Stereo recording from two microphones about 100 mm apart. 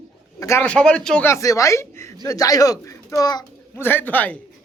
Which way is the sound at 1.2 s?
30° left (ahead or behind).